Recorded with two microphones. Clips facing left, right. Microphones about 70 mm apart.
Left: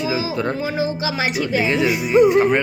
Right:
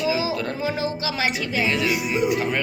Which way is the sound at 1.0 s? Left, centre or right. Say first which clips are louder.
Left 3 dB; centre.